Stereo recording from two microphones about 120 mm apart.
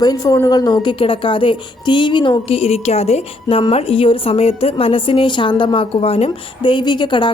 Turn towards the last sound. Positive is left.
turn(degrees=45)  # may be behind; listen again after turning